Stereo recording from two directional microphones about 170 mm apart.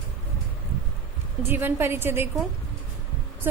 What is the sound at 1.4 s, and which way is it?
Speech, 10° right (ahead or behind).